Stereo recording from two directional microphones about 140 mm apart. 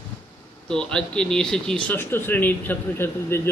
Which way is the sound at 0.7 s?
5° left (ahead or behind).